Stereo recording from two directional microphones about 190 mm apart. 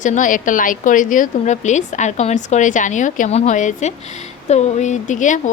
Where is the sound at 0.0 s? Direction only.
40° left (ahead or behind).